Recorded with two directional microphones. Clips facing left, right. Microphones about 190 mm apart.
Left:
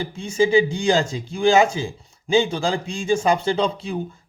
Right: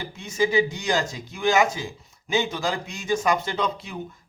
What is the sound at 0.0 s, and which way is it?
Speech, 30° left (ahead or behind).